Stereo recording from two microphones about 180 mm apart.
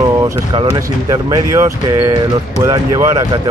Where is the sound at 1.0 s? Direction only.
20° right (ahead or behind).